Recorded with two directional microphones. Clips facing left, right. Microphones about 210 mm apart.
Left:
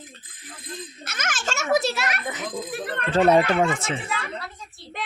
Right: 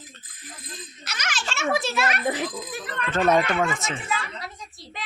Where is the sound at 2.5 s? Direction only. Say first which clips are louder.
Left 4 dB; 55° left (ahead or behind).